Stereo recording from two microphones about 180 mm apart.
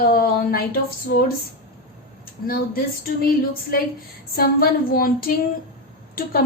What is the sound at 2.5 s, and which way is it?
Speech, 55° left (ahead or behind).